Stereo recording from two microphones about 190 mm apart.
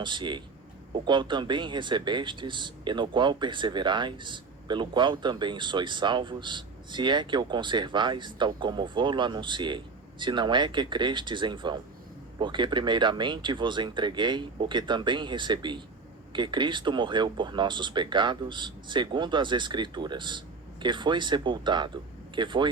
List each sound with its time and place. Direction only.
0.0 s speech: 25° right (ahead or behind)